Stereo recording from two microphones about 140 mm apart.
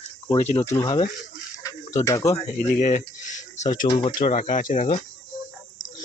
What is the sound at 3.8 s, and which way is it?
Speech, 35° left (ahead or behind).